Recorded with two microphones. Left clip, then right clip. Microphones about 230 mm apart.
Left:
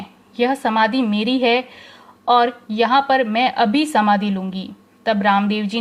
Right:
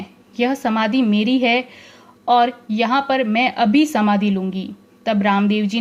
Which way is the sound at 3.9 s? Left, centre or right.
Left.